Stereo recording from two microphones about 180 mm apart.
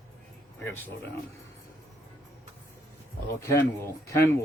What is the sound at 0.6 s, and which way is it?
Speech, 10° left (ahead or behind).